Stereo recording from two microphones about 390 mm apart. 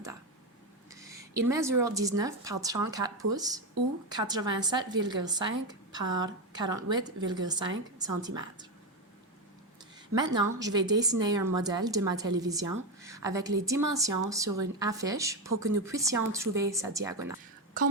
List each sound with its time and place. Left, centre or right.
1.2 s a woman's voice: centre
10.2 s a woman's voice: centre